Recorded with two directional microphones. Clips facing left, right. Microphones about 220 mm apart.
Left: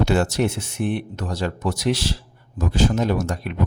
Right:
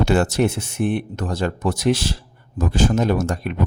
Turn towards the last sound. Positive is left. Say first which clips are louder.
# right 2 dB
turn(degrees=-45)  # may be behind; listen again after turning